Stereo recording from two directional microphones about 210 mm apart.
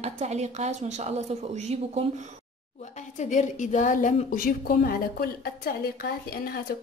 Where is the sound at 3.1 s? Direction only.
35° left (ahead or behind).